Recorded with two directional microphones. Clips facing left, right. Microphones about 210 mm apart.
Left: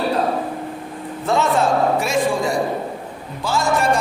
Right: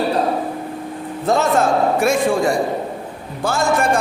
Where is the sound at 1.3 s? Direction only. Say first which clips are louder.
Right 2 dB; 45° right (ahead or behind).